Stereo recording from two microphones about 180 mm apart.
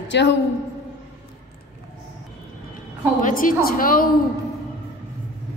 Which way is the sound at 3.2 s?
50° left (ahead or behind).